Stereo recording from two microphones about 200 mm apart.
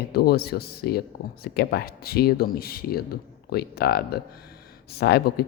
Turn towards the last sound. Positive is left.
turn(degrees=50)  # may be behind; listen again after turning